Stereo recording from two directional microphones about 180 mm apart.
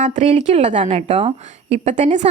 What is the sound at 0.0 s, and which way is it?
A woman's voice, 35° right (ahead or behind).